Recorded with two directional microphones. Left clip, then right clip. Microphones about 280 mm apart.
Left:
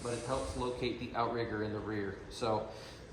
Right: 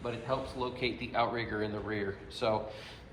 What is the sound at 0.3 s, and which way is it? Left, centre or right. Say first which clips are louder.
A man's voice: right 3 dB; centre.